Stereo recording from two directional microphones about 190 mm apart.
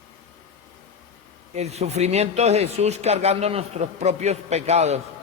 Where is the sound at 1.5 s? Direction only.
35° right (ahead or behind).